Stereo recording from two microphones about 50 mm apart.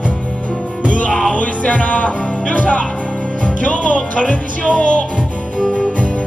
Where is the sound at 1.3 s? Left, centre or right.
Left.